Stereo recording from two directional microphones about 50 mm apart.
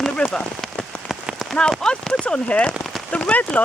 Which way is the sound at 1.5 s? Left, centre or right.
Centre.